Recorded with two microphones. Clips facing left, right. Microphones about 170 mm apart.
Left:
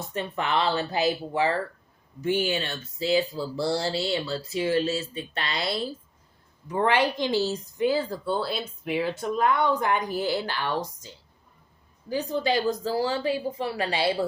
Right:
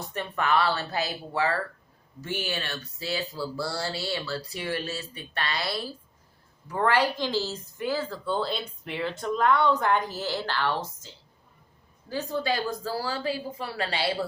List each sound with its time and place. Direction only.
0.1 s speech: 25° left (ahead or behind)
8.3 s speech: 5° left (ahead or behind); by 14.1 s 20° left (ahead or behind)